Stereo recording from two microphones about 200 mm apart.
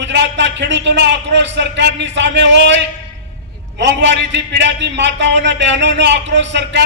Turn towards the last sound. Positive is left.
turn(degrees=-60)  # may be behind; listen again after turning